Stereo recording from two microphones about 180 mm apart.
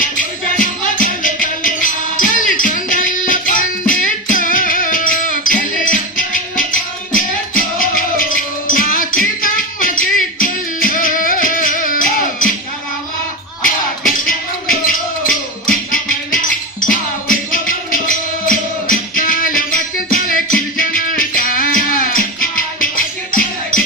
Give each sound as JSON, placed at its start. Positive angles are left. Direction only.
{"t": 0.5, "sound": "music", "side_deg": 50}
{"t": 14.3, "sound": "music", "side_deg": 50}